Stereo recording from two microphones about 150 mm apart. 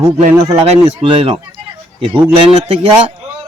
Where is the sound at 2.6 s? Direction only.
40° right (ahead or behind).